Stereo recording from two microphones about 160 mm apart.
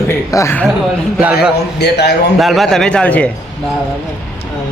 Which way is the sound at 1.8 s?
90° left.